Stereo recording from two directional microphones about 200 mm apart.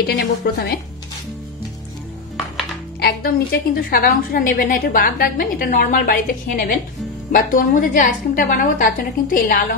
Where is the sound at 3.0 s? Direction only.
50° left (ahead or behind).